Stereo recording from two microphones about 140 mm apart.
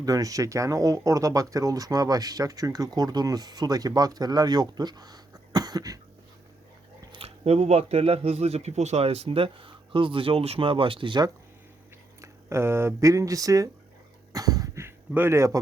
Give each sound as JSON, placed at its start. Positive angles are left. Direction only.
{"t": 0.0, "sound": "speech", "side_deg": -25}
{"t": 7.1, "sound": "speech", "side_deg": -45}
{"t": 12.2, "sound": "speech", "side_deg": -20}
{"t": 14.3, "sound": "a sound", "side_deg": -25}